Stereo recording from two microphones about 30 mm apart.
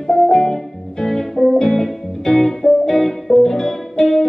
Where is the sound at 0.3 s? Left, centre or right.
Centre.